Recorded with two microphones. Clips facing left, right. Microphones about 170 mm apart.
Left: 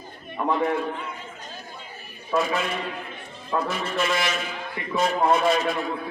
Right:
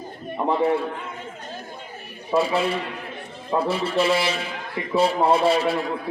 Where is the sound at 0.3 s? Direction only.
30° right (ahead or behind).